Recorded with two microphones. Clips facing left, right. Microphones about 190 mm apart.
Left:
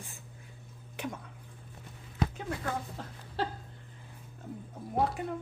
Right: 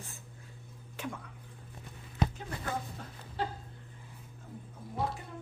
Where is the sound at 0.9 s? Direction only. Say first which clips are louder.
Left 2 dB; 20° left (ahead or behind).